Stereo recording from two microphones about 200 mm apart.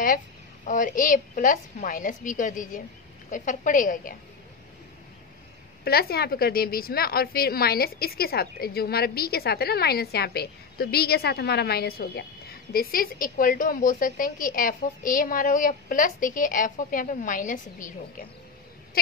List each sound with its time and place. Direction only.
0.7 s a woman's voice: 40° left (ahead or behind)
5.9 s a woman's voice: 50° left (ahead or behind)